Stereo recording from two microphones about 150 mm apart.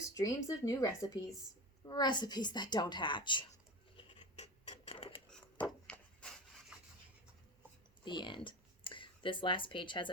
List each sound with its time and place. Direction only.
0.1 s a woman's voice: 25° left (ahead or behind)
3.9 s scratch: 35° left (ahead or behind)
5.9 s rub: 5° left (ahead or behind)
6.7 s rub: 5° right (ahead or behind)
8.0 s speech: 30° left (ahead or behind)